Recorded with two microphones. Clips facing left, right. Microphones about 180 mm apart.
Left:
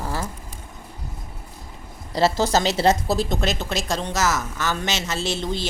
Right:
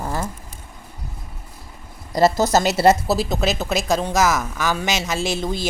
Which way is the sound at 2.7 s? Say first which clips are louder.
Right 3 dB; 5° right (ahead or behind).